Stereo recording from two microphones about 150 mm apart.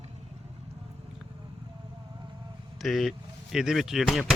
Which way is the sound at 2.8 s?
Centre (ahead or behind).